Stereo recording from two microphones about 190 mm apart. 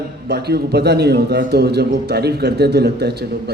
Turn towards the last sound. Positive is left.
turn(degrees=-60)  # may be behind; listen again after turning